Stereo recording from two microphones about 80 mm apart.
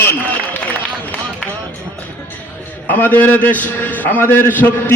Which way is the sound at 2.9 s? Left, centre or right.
Left.